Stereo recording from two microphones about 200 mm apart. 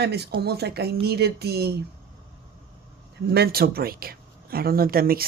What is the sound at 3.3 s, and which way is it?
Speech, 50° right (ahead or behind).